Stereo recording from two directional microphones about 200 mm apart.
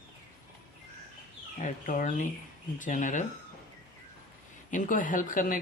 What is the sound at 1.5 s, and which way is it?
Speech, 40° left (ahead or behind).